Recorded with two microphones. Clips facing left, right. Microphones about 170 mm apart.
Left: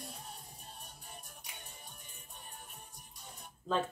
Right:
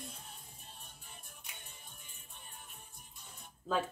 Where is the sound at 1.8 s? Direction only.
45° left (ahead or behind).